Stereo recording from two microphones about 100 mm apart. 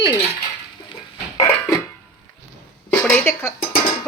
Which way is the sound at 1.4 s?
25° left (ahead or behind).